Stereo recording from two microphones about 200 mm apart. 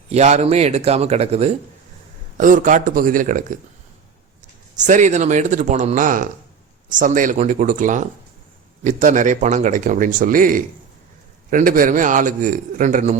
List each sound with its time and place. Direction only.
0.1 s speech: 35° right (ahead or behind)
4.9 s speech: 40° right (ahead or behind)